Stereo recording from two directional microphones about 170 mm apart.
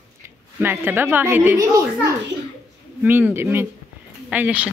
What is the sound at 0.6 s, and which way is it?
A woman's voice, 10° right (ahead or behind).